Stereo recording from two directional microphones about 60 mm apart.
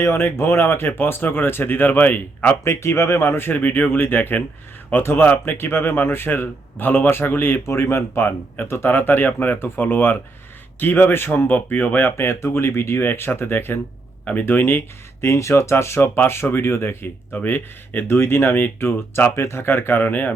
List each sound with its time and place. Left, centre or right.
0.0 s a man's voice: left
2.6 s a man's voice: left
15.2 s speech: left